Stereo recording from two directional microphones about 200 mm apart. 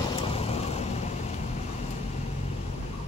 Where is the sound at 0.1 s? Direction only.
30° left (ahead or behind).